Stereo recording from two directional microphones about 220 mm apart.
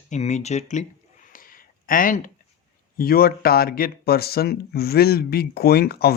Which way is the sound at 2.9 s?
40° left (ahead or behind).